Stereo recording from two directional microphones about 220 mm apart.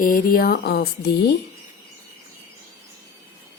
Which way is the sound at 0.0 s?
40° left (ahead or behind).